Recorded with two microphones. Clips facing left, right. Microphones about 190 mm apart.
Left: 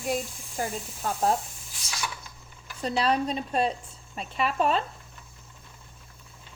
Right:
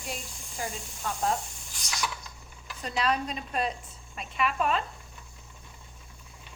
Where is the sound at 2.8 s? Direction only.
35° left (ahead or behind).